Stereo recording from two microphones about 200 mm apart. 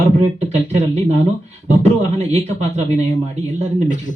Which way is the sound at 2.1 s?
35° right (ahead or behind).